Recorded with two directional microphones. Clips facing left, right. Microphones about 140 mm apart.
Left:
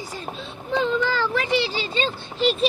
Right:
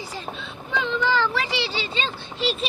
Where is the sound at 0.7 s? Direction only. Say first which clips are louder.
Left 2 dB; 35° left (ahead or behind).